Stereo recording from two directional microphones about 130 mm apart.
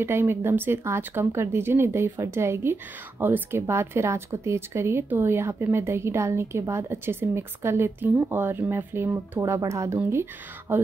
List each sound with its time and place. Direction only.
0.0 s speech: 20° right (ahead or behind)